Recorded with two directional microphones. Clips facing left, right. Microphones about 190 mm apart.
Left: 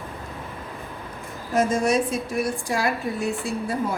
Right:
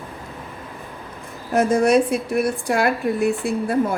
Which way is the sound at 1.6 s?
60° right (ahead or behind).